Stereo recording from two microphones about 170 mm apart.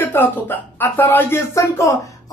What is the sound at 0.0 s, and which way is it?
A woman's voice, 10° left (ahead or behind).